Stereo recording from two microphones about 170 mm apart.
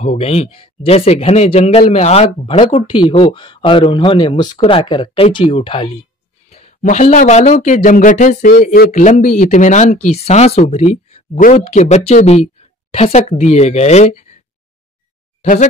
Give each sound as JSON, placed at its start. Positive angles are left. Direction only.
{"t": 0.0, "sound": "speech", "side_deg": 40}